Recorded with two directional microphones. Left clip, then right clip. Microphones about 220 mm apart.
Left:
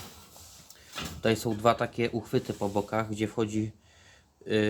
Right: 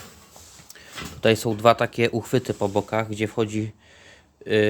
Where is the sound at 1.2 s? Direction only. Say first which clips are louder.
Right 8 dB; 35° right (ahead or behind).